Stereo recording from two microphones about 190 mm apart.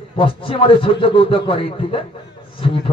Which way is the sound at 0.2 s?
30° left (ahead or behind).